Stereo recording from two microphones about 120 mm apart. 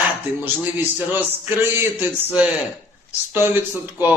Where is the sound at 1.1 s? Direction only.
20° right (ahead or behind).